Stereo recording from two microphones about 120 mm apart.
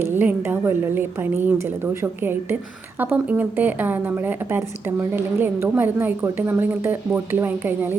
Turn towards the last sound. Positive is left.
turn(degrees=-15)  # may be behind; listen again after turning